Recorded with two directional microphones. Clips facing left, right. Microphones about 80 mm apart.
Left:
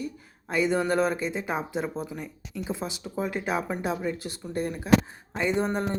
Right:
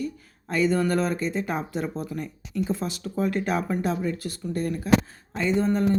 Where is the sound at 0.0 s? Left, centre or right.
Centre.